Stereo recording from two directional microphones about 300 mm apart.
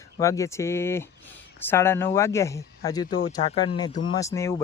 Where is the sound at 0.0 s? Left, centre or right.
Centre.